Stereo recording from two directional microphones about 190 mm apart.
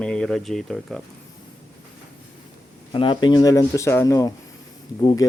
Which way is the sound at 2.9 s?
25° left (ahead or behind).